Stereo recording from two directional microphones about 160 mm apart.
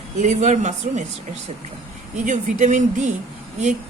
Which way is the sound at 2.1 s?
50° right (ahead or behind).